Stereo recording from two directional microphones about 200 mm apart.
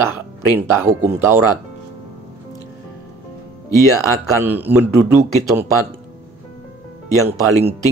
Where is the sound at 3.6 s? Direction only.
15° left (ahead or behind).